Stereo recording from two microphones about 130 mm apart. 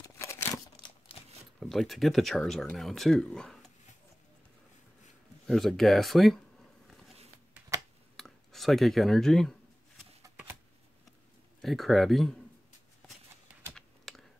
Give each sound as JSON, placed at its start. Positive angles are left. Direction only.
{"t": 0.0, "sound": "a sound", "side_deg": 20}
{"t": 1.6, "sound": "speech", "side_deg": 0}
{"t": 5.5, "sound": "speech", "side_deg": 0}
{"t": 8.2, "sound": "a sound", "side_deg": 0}
{"t": 11.6, "sound": "speech", "side_deg": 0}
{"t": 13.7, "sound": "typing", "side_deg": 0}